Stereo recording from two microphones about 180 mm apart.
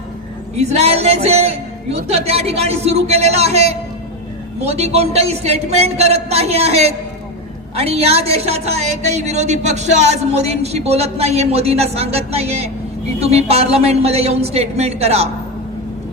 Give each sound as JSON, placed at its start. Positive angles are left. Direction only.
{"t": 0.5, "sound": "a woman's voice", "side_deg": -35}